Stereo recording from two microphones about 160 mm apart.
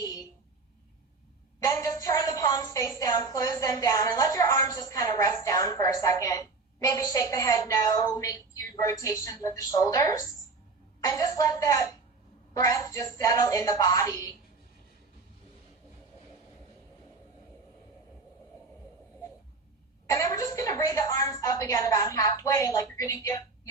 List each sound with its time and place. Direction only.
0.0 s a sound: 20° left (ahead or behind)
1.5 s a woman's voice: 20° left (ahead or behind)
20.1 s a woman's voice: 20° left (ahead or behind)